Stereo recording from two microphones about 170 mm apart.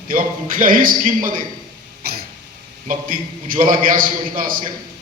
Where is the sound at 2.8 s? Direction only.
55° right (ahead or behind).